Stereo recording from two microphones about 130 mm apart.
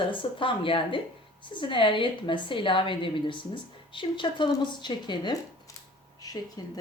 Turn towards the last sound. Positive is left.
turn(degrees=30)  # may be behind; listen again after turning